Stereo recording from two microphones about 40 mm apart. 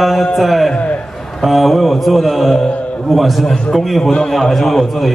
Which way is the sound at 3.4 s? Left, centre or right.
Centre.